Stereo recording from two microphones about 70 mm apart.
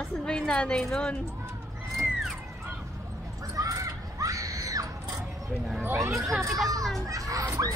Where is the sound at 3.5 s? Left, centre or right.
Right.